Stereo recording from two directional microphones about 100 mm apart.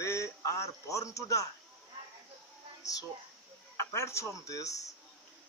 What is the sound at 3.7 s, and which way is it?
Speech, 30° left (ahead or behind).